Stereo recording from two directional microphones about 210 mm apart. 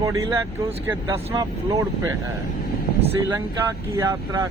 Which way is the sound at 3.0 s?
15° right (ahead or behind).